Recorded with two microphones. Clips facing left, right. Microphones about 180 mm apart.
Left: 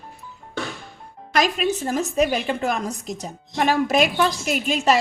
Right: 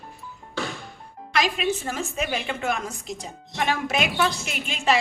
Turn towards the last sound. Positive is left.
turn(degrees=40)  # may be behind; listen again after turning